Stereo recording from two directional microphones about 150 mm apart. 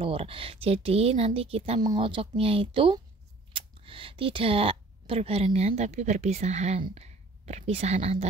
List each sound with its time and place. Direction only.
0.0 s a woman's voice: 40° right (ahead or behind)